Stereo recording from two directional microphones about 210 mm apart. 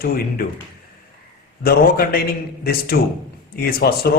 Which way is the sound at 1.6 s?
45° left (ahead or behind).